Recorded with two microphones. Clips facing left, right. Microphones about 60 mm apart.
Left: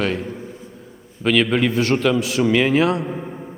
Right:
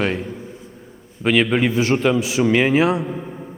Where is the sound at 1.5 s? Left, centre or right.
Centre.